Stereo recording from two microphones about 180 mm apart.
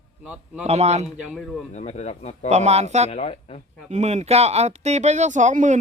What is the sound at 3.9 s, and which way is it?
Speech, 40° right (ahead or behind).